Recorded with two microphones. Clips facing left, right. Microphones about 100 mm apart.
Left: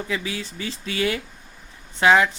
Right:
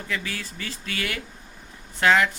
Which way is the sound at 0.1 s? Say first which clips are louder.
Left 3 dB; 15° left (ahead or behind).